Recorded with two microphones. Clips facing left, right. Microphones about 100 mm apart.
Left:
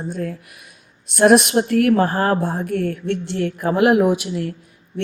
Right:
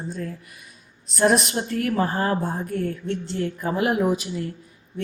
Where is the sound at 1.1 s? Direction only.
70° left (ahead or behind).